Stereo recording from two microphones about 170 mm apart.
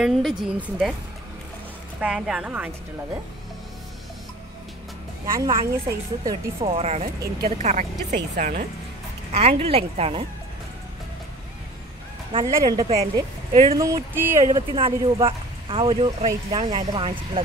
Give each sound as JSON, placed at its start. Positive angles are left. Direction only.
{"t": 0.0, "sound": "a woman's voice", "side_deg": -5}
{"t": 2.0, "sound": "a woman's voice", "side_deg": -5}
{"t": 5.2, "sound": "a woman's voice", "side_deg": -20}
{"t": 6.6, "sound": "speech", "side_deg": -35}
{"t": 8.1, "sound": "speech", "side_deg": -60}
{"t": 9.3, "sound": "speech", "side_deg": -40}
{"t": 12.4, "sound": "speech", "side_deg": -20}
{"t": 12.8, "sound": "speech", "side_deg": -35}
{"t": 13.7, "sound": "speech", "side_deg": -15}
{"t": 14.7, "sound": "speech", "side_deg": -30}